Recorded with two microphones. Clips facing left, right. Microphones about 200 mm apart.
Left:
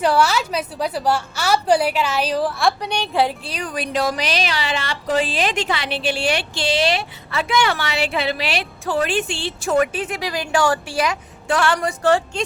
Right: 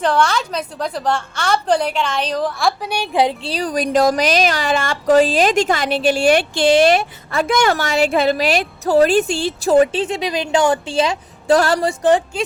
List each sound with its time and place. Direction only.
0.0 s a woman's voice: 10° left (ahead or behind); by 3.3 s 15° right (ahead or behind)
3.4 s a woman's voice: 35° right (ahead or behind)